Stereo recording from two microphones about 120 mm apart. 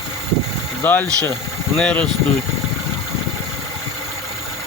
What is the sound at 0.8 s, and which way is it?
Speech, 15° left (ahead or behind).